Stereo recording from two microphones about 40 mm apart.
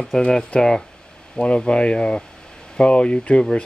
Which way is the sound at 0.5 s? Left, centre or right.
Left.